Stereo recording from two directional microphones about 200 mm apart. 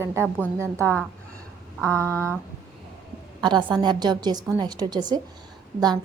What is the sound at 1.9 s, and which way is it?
Speech, 15° right (ahead or behind).